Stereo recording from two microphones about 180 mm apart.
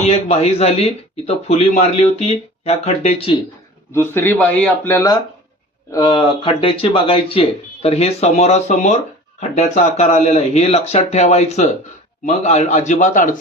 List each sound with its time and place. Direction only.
0.0 s speech: 35° left (ahead or behind)
3.9 s speech: 15° left (ahead or behind); by 13.4 s 45° left (ahead or behind)